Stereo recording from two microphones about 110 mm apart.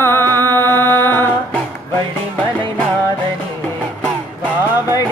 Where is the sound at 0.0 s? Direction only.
20° left (ahead or behind).